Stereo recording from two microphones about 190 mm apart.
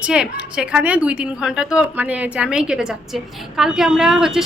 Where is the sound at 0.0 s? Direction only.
5° right (ahead or behind).